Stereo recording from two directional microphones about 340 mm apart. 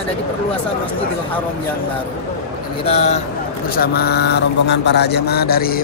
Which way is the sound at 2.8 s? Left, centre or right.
Centre.